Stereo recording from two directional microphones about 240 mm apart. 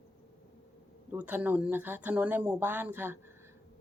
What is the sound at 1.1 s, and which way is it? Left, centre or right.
Speech, centre.